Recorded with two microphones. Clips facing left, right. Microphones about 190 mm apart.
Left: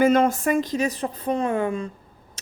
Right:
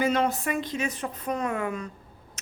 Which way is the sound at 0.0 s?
50° left (ahead or behind).